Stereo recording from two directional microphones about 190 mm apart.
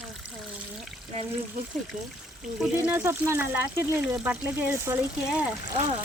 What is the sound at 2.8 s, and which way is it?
Speech, 15° right (ahead or behind).